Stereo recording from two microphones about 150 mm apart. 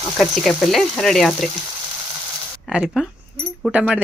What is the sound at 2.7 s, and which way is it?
Speech, centre (ahead or behind).